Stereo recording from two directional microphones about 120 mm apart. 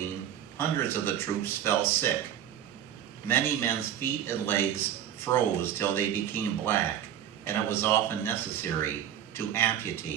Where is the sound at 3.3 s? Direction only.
20° left (ahead or behind).